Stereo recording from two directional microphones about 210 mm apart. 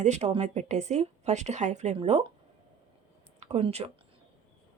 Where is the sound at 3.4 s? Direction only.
30° right (ahead or behind).